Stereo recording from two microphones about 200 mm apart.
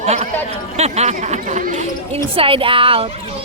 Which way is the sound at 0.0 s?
30° right (ahead or behind).